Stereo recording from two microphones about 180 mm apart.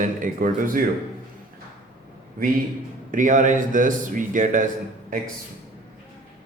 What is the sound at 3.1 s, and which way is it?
Speech, 45° right (ahead or behind).